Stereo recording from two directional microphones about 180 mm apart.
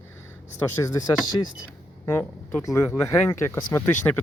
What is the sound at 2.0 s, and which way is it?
Speech, 10° left (ahead or behind).